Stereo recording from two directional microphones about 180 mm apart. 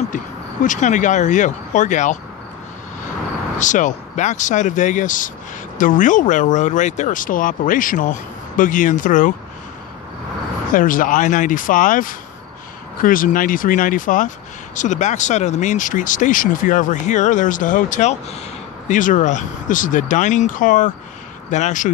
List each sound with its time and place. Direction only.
0.1 s speech: 45° left (ahead or behind)
3.5 s speech: 45° left (ahead or behind)
10.7 s speech: 50° left (ahead or behind)